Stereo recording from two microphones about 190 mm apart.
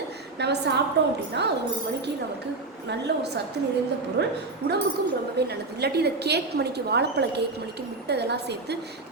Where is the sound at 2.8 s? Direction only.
60° right (ahead or behind).